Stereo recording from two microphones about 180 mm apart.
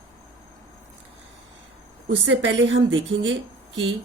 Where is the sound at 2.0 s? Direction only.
90° right.